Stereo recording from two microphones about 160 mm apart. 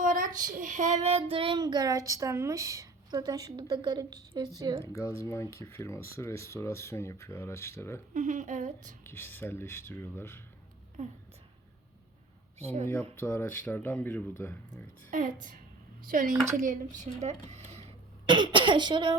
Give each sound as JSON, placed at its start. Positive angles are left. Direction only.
{"t": 0.0, "sound": "a sound", "side_deg": -55}
{"t": 0.5, "sound": "child singing", "side_deg": -50}
{"t": 4.8, "sound": "speech", "side_deg": 20}
{"t": 8.1, "sound": "speech", "side_deg": -50}
{"t": 9.0, "sound": "speech", "side_deg": 15}
{"t": 11.0, "sound": "speech", "side_deg": -50}
{"t": 13.2, "sound": "speech", "side_deg": 10}
{"t": 15.1, "sound": "a woman's voice", "side_deg": -55}
{"t": 18.3, "sound": "child singing", "side_deg": -30}